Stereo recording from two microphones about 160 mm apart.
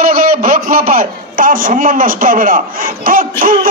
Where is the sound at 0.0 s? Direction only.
65° right (ahead or behind).